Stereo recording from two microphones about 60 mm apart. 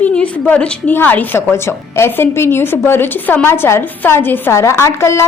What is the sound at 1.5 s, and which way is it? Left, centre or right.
A woman's voice, left.